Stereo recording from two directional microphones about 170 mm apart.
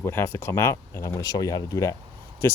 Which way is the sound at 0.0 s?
15° left (ahead or behind).